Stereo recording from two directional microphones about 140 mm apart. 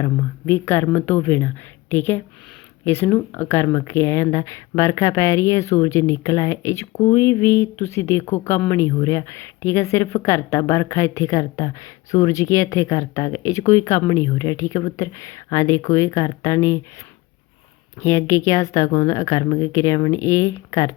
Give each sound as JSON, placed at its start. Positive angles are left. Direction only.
{"t": 0.0, "sound": "speech", "side_deg": 20}
{"t": 18.0, "sound": "speech", "side_deg": 20}